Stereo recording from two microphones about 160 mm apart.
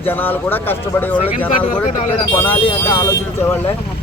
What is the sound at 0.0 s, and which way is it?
Speech, 10° left (ahead or behind).